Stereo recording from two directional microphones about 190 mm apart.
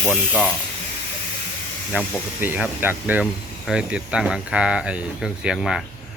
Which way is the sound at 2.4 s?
10° right (ahead or behind).